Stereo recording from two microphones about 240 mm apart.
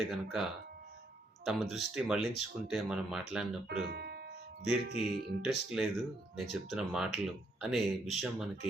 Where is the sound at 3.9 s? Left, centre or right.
Right.